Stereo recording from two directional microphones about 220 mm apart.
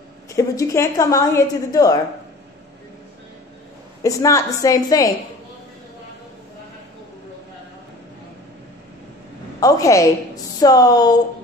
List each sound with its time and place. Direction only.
0.4 s a woman's voice: 15° left (ahead or behind)
4.0 s a woman's voice: 15° left (ahead or behind)
9.6 s a woman's voice: 15° left (ahead or behind)